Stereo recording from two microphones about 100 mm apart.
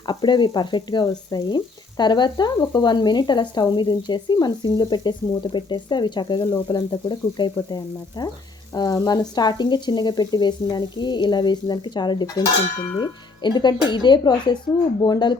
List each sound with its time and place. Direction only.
0.1 s speech: 50° left (ahead or behind)